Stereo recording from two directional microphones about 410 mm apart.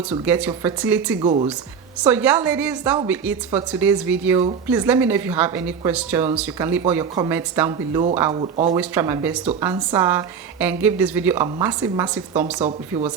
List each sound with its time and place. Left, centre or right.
0.3 s a woman's voice: centre